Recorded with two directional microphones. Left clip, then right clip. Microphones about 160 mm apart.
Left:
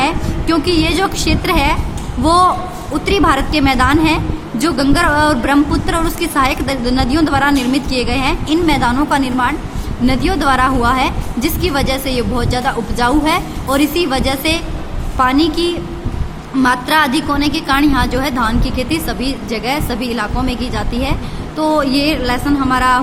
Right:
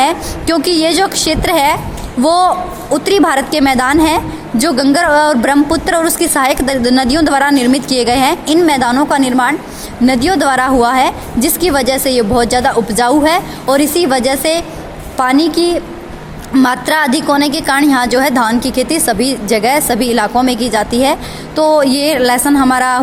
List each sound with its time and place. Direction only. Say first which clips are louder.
0.0 s a woman's voice: right 4 dB; 50° right (ahead or behind)
2.2 s a woman's voice: right 1 dB; 40° right (ahead or behind)
16.6 s a woman's voice: right 1 dB; 55° right (ahead or behind)